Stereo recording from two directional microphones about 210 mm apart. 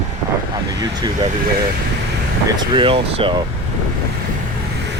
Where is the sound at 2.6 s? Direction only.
25° right (ahead or behind).